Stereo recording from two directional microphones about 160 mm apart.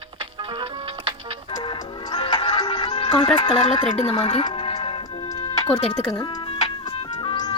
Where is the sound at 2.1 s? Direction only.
30° left (ahead or behind).